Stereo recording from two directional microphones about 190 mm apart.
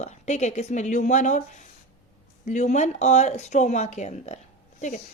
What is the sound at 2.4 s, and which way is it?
A woman's voice, 40° left (ahead or behind).